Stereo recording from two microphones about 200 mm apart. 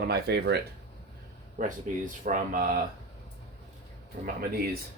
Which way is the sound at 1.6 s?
45° right (ahead or behind).